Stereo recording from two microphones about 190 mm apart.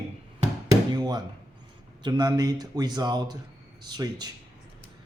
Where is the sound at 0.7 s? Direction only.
20° right (ahead or behind).